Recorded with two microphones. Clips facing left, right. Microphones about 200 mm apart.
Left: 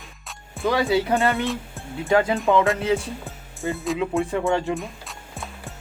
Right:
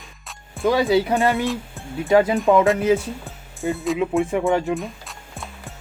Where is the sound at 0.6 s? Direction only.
15° right (ahead or behind).